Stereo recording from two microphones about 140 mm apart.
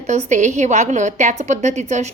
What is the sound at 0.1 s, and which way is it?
A woman's voice, 60° right (ahead or behind).